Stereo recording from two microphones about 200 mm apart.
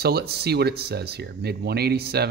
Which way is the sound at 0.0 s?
50° right (ahead or behind).